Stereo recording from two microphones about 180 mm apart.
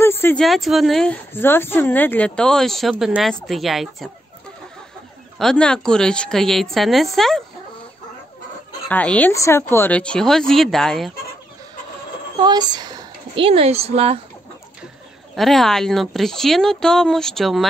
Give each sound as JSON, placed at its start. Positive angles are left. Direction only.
{"t": 0.0, "sound": "a sound", "side_deg": 15}
{"t": 0.4, "sound": "a woman's voice", "side_deg": 0}
{"t": 5.4, "sound": "a woman's voice", "side_deg": 5}
{"t": 8.8, "sound": "speech", "side_deg": 10}
{"t": 12.4, "sound": "speech", "side_deg": -25}
{"t": 15.3, "sound": "a woman's voice", "side_deg": 0}